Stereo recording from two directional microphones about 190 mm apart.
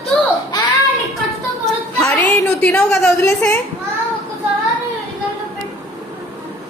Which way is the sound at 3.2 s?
15° left (ahead or behind).